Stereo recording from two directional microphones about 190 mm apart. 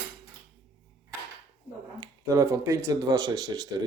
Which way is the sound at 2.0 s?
15° right (ahead or behind).